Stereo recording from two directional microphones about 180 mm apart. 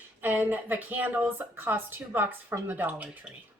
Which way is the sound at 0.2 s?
10° right (ahead or behind).